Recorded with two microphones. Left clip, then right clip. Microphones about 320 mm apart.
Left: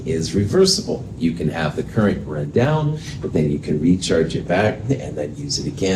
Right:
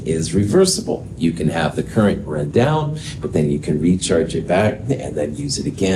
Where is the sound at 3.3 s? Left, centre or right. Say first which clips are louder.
Right 1 dB; right.